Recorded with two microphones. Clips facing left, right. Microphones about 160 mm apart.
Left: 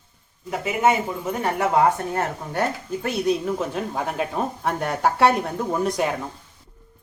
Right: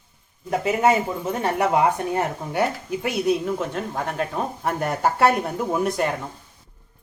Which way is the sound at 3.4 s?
Centre (ahead or behind).